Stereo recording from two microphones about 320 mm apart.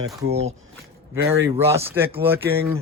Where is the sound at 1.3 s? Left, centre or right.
Centre.